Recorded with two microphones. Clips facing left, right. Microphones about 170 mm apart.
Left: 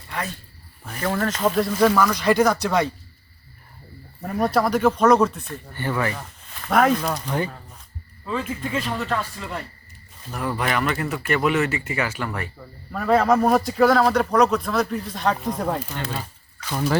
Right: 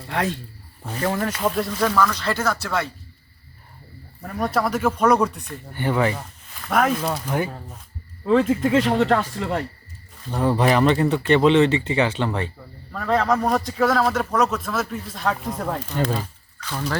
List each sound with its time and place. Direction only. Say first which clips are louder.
0.1 s speech: right 6 dB; 85° right
0.9 s speech: right 2 dB; 25° right (ahead or behind)
1.1 s speech: left 1 dB; 15° right (ahead or behind)
1.5 s speech: left 5 dB; centre (ahead or behind); by 2.9 s 15° left (ahead or behind)
4.4 s speech: left 2 dB; centre (ahead or behind); by 6.2 s 20° right (ahead or behind)
6.7 s speech: left 2 dB; centre (ahead or behind)
8.3 s speech: right 9 dB; 75° right (ahead or behind)
10.3 s speech: right 6 dB; 30° right (ahead or behind)
12.9 s speech: left 3 dB; 5° left (ahead or behind)
16.1 s a sound: right 3 dB; 10° left (ahead or behind)